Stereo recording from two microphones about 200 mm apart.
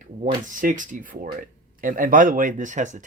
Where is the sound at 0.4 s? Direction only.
40° right (ahead or behind).